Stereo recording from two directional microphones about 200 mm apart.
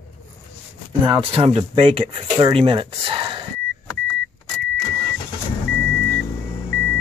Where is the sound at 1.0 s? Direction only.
25° right (ahead or behind).